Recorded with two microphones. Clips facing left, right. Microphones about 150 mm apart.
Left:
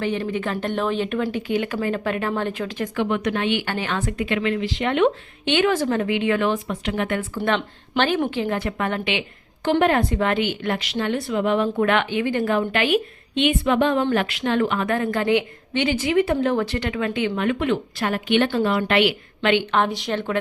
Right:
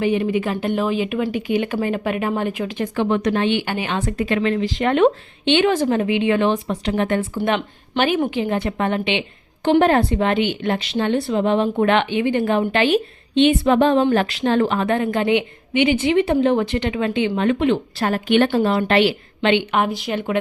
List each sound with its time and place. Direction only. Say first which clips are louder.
0.0 s speech: right 5 dB; 15° right (ahead or behind)
2.9 s speech: right 4 dB; 35° right (ahead or behind)
3.7 s speech: right 2 dB; 15° right (ahead or behind)
3.9 s speech: right 4 dB; 35° right (ahead or behind)
5.5 s a woman's voice: right 3 dB; 25° right (ahead or behind)
7.4 s a woman's voice: right 2 dB; 15° right (ahead or behind)
19.7 s speech: right 1 dB; 5° right (ahead or behind)